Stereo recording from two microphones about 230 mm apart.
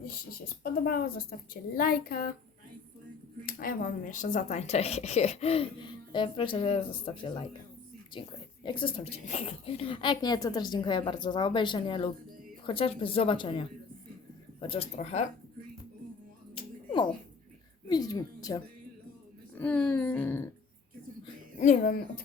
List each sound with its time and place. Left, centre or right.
0.0 s speech: left
3.4 s speech: left
8.6 s speech: left
16.6 s finger snapping: centre
17.8 s speech: centre
21.6 s speech: left